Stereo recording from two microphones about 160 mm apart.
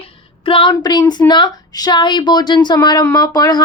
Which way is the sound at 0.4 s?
30° left (ahead or behind).